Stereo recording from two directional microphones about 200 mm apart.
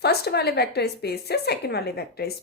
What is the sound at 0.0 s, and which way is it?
A woman's voice, 55° left (ahead or behind).